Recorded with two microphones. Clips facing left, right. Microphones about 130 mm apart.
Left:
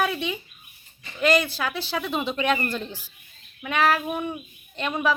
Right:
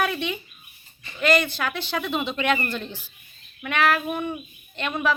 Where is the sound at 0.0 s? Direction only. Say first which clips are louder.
Even; 5° left (ahead or behind).